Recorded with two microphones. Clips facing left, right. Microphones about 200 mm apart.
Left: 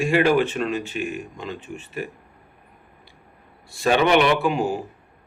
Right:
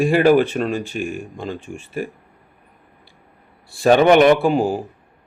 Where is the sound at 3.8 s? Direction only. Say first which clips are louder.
Right 6 dB; 45° right (ahead or behind).